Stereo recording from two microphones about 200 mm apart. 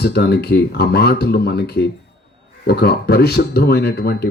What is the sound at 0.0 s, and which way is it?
Speech, 55° left (ahead or behind).